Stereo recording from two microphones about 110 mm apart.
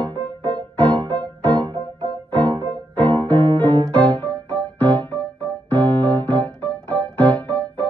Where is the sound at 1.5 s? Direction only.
45° right (ahead or behind).